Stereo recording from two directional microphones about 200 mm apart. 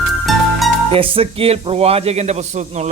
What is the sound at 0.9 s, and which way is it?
A man's voice, 25° right (ahead or behind).